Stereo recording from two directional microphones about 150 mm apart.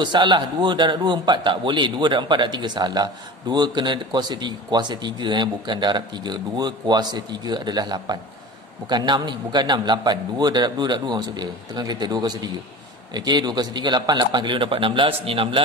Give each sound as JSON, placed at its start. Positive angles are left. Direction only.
{"t": 0.0, "sound": "a man's voice", "side_deg": -30}